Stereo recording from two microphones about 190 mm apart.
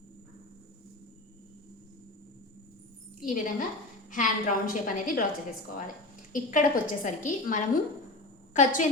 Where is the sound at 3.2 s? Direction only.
45° left (ahead or behind).